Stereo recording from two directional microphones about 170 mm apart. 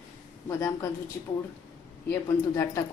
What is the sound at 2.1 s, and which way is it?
Speech, 15° left (ahead or behind).